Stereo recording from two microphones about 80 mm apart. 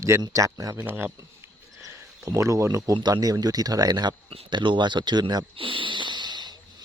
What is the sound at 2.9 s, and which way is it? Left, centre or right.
Speech, right.